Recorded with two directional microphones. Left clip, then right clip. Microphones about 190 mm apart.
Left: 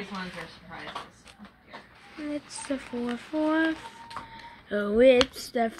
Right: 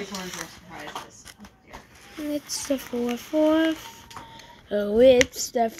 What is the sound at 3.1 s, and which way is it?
Female singing, 10° right (ahead or behind).